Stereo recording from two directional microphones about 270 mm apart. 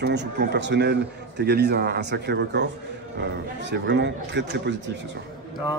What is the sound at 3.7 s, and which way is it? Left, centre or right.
Speech, right.